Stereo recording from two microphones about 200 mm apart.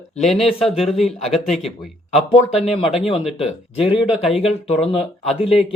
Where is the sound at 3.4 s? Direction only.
30° left (ahead or behind).